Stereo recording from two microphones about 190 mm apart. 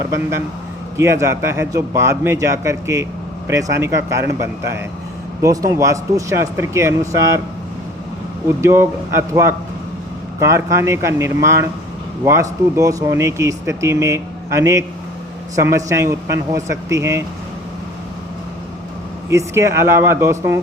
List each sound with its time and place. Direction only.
0.9 s speech: 15° right (ahead or behind)
8.4 s speech: 15° right (ahead or behind)
10.4 s speech: 15° right (ahead or behind)
19.3 s speech: 15° right (ahead or behind)